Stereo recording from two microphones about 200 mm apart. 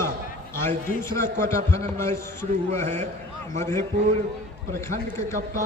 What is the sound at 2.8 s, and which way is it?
Speech, 35° right (ahead or behind).